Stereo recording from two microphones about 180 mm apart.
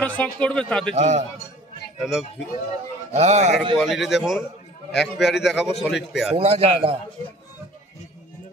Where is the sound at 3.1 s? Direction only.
35° right (ahead or behind).